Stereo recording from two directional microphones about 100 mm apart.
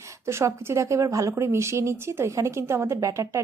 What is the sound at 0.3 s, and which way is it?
A woman's voice, 25° right (ahead or behind).